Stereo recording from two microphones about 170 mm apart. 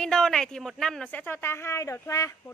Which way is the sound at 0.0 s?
5° left (ahead or behind).